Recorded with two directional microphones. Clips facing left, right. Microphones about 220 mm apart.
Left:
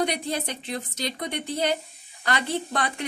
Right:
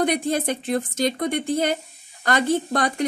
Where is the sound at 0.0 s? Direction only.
50° right (ahead or behind).